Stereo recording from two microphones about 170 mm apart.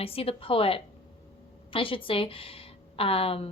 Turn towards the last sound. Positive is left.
turn(degrees=35)  # may be behind; listen again after turning